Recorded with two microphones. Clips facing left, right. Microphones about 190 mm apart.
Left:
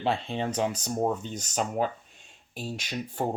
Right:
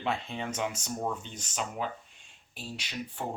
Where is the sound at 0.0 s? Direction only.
30° left (ahead or behind).